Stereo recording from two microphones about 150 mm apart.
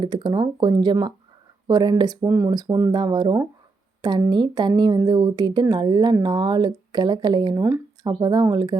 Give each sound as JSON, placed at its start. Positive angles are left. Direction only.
{"t": 0.0, "sound": "speech", "side_deg": -35}